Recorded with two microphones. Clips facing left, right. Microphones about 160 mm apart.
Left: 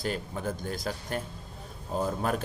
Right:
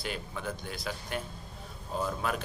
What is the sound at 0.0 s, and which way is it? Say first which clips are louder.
Speech: left 5 dB; 45° left (ahead or behind).